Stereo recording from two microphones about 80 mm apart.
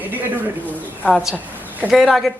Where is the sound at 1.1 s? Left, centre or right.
Centre.